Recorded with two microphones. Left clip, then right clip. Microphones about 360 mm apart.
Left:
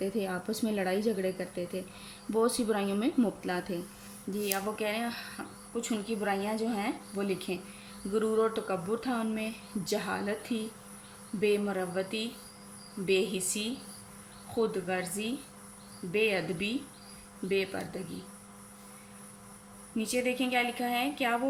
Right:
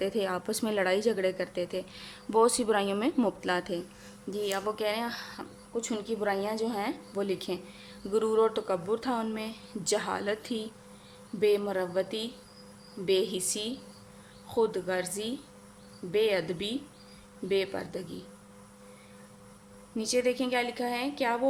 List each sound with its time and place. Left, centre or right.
0.0 s a woman's voice: centre
20.0 s a woman's voice: centre